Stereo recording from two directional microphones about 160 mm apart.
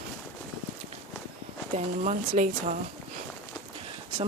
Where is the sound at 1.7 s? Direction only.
45° right (ahead or behind).